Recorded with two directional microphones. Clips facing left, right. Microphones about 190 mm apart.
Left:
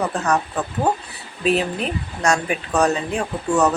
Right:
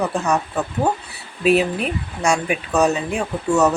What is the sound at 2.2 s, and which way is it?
Speech, 10° right (ahead or behind).